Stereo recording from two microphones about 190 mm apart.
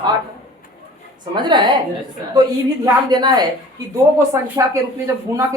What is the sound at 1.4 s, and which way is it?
Speech, 25° right (ahead or behind).